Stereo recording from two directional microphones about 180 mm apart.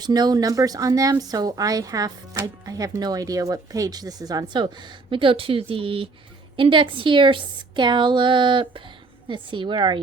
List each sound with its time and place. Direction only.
0.0 s speech: 20° right (ahead or behind)